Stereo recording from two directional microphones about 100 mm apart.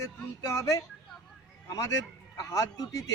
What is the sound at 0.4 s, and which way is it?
Speech, 30° left (ahead or behind).